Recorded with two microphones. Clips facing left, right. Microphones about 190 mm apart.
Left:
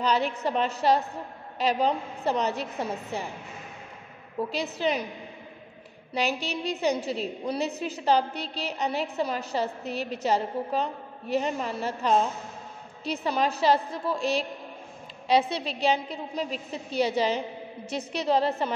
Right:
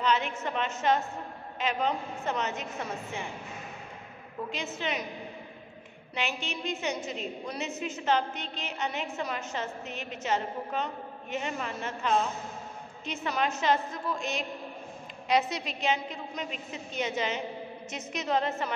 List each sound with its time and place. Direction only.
0.0 s a woman's voice: 35° left (ahead or behind)
4.5 s a woman's voice: 35° left (ahead or behind)
6.1 s a woman's voice: 35° left (ahead or behind)